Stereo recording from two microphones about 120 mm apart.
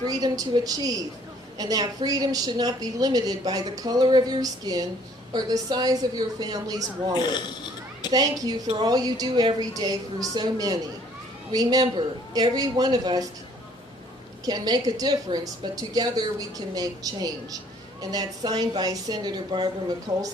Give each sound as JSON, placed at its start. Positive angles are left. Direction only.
{"t": 0.0, "sound": "a woman's voice", "side_deg": -30}
{"t": 7.1, "sound": "speech", "side_deg": 40}
{"t": 8.1, "sound": "a woman's voice", "side_deg": -35}
{"t": 14.4, "sound": "a woman's voice", "side_deg": -35}